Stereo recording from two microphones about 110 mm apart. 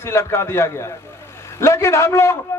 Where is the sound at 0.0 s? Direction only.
25° left (ahead or behind).